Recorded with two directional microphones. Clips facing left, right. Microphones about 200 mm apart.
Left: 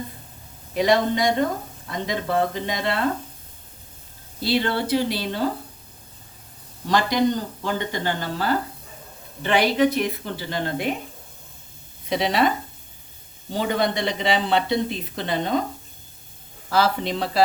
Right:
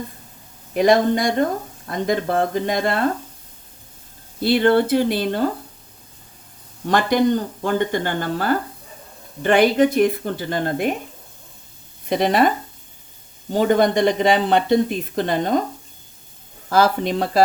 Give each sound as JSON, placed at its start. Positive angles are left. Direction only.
{"t": 0.8, "sound": "speech", "side_deg": -50}
{"t": 4.4, "sound": "speech", "side_deg": -55}
{"t": 6.8, "sound": "speech", "side_deg": -55}
{"t": 12.0, "sound": "speech", "side_deg": -50}
{"t": 13.5, "sound": "speech", "side_deg": -50}
{"t": 16.6, "sound": "speech", "side_deg": -45}